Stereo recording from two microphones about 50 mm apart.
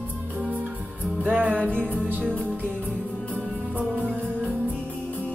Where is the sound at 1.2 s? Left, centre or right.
Right.